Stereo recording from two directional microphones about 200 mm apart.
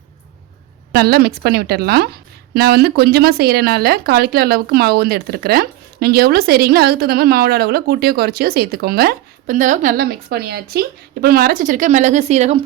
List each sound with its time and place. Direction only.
0.9 s speech: 50° right (ahead or behind); by 12.6 s 30° right (ahead or behind)